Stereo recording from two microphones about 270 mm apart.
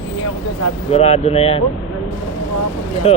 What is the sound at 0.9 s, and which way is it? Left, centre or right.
Speech, left.